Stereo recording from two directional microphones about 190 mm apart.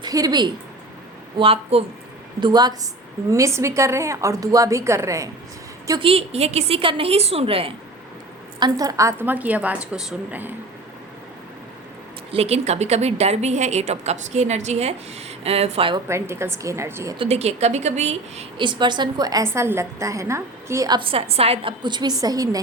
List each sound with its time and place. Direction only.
0.0 s a woman's voice: 20° right (ahead or behind)
5.9 s a woman's voice: 30° right (ahead or behind); by 10.5 s 5° right (ahead or behind)
12.3 s a woman's voice: 30° right (ahead or behind)
16.0 s a woman's voice: 15° right (ahead or behind)
17.2 s a woman's voice: 35° right (ahead or behind); by 22.6 s 20° right (ahead or behind)